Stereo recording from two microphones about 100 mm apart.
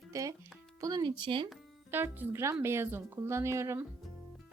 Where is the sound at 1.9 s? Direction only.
20° right (ahead or behind).